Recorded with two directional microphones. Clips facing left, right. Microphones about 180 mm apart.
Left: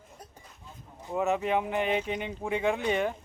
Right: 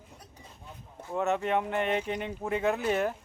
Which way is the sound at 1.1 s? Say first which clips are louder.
Left 1 dB; 5° left (ahead or behind).